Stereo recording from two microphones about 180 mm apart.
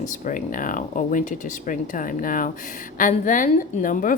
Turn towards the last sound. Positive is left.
turn(degrees=45)  # may be behind; listen again after turning